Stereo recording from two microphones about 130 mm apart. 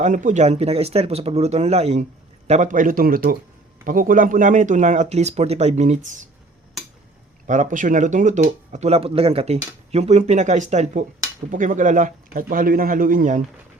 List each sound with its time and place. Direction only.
0.0 s speech: 75° right (ahead or behind); by 2.0 s 55° right (ahead or behind)
2.5 s a man's voice: 70° right (ahead or behind)
7.4 s speech: 70° right (ahead or behind)
11.5 s a man's voice: 90° right